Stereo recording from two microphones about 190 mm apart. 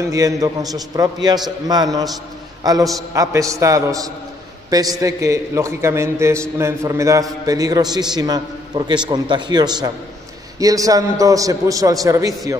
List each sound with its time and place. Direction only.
0.1 s a man's voice: 20° right (ahead or behind)